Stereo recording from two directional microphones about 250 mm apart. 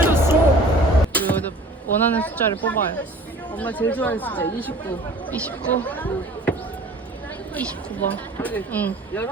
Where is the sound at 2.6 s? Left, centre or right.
Centre.